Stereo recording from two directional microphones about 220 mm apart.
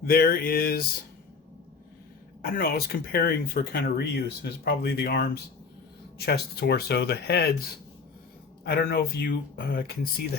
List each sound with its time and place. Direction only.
0.0 s a sound: 40° left (ahead or behind)
2.4 s speech: 40° left (ahead or behind)
8.6 s speech: 45° left (ahead or behind)